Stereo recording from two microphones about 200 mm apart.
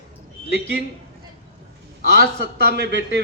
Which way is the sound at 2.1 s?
55° right (ahead or behind).